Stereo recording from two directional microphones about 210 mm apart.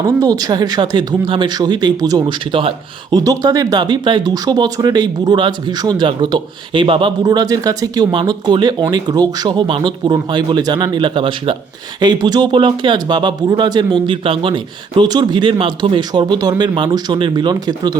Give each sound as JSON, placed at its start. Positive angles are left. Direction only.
{"t": 0.2, "sound": "speech", "side_deg": -20}